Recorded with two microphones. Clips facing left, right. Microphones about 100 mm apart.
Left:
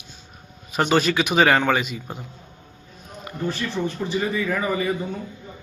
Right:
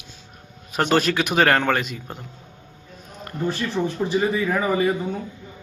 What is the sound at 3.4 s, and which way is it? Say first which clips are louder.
Speech: right 2 dB; 10° right (ahead or behind).